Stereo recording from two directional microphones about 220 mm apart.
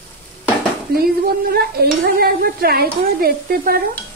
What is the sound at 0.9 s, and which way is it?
Speech, 45° right (ahead or behind).